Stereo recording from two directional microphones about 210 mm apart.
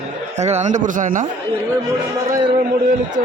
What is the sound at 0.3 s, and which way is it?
Speech, 30° right (ahead or behind).